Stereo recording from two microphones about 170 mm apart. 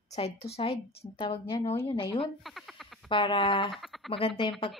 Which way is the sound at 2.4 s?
Centre (ahead or behind).